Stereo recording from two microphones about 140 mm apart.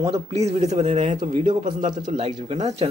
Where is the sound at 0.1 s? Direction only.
50° right (ahead or behind).